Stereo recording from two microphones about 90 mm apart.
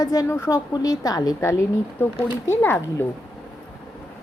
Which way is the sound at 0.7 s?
40° left (ahead or behind).